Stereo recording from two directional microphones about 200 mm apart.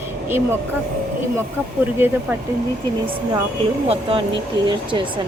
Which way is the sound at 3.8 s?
25° right (ahead or behind).